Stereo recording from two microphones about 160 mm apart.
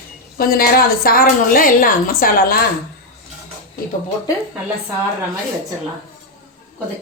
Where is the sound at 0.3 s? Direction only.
65° left (ahead or behind).